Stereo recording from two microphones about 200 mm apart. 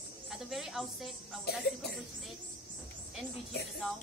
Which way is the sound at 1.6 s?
55° left (ahead or behind).